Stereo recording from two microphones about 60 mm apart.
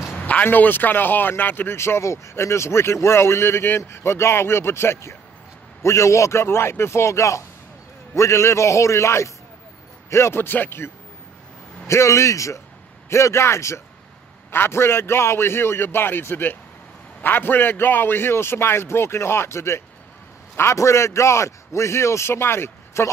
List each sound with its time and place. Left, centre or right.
0.2 s a man's voice: left
1.8 s a man's voice: left
11.9 s a man's voice: left